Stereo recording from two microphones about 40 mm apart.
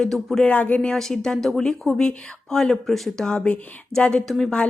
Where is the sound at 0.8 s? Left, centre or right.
Centre.